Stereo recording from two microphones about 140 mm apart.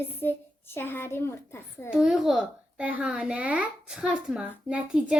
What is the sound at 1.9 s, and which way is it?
A child's voice, centre (ahead or behind).